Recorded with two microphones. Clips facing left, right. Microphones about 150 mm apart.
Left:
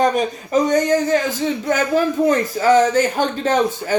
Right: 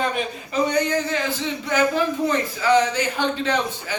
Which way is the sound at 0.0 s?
40° left (ahead or behind).